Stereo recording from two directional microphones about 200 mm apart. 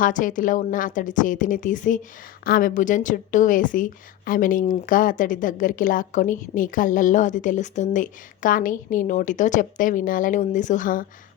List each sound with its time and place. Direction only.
0.0 s a woman's voice: 40° left (ahead or behind)